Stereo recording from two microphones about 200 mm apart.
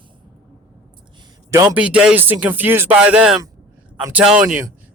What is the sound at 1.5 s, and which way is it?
A man's voice, 10° right (ahead or behind).